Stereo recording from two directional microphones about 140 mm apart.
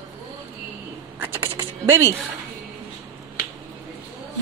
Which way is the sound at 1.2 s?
15° right (ahead or behind).